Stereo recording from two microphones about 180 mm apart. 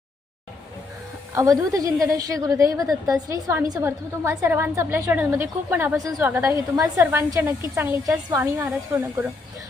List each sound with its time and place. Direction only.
1.3 s a woman's voice: 15° right (ahead or behind)